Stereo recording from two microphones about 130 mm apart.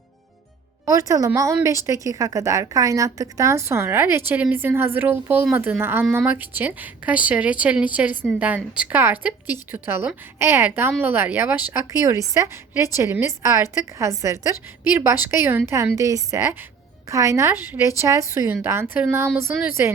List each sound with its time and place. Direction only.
0.9 s a woman's voice: 25° right (ahead or behind)